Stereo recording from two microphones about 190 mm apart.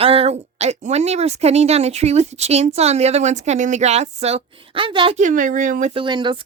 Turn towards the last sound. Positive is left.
turn(degrees=-25)  # may be behind; listen again after turning